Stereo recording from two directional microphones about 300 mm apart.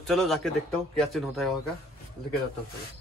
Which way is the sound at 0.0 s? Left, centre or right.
Centre.